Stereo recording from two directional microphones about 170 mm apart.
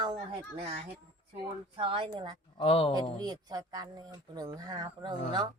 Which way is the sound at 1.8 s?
30° right (ahead or behind).